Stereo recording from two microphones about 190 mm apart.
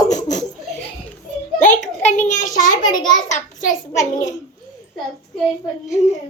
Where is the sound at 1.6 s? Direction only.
40° left (ahead or behind).